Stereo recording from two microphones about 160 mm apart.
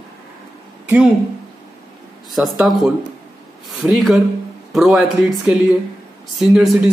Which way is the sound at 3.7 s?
Centre (ahead or behind).